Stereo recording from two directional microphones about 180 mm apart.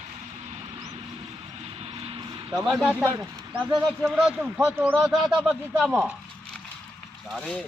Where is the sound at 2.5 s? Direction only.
5° right (ahead or behind).